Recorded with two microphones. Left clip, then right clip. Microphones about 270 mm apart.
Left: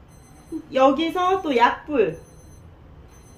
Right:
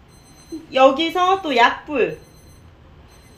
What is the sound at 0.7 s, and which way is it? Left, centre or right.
Speech, centre.